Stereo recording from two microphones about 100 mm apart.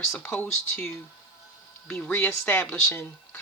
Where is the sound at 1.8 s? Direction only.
15° left (ahead or behind).